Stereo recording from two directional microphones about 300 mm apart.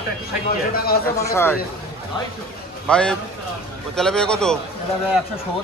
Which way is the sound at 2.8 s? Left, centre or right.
Centre.